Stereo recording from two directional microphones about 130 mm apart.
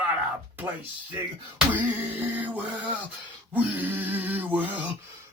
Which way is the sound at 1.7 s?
15° right (ahead or behind).